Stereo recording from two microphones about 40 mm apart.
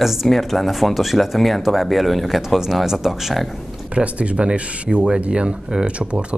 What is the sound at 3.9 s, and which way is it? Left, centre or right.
Speech, right.